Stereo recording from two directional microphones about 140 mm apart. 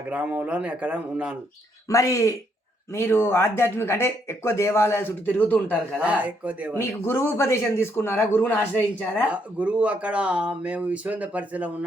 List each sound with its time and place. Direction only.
0.1 s speech: 10° right (ahead or behind)
1.9 s speech: 20° left (ahead or behind)
6.0 s speech: 10° right (ahead or behind)
6.7 s speech: 15° left (ahead or behind)
9.3 s speech: 10° right (ahead or behind)